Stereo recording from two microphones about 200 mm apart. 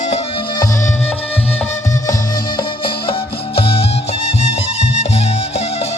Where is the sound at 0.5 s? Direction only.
20° left (ahead or behind).